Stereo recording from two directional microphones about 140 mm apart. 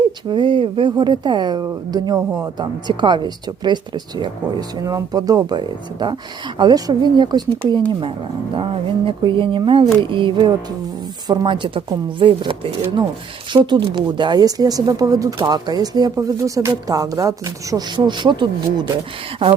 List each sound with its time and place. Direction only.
0.3 s speech: 35° right (ahead or behind)
8.5 s speech: 40° right (ahead or behind)